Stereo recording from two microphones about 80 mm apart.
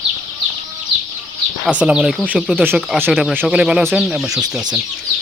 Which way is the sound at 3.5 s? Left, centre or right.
Centre.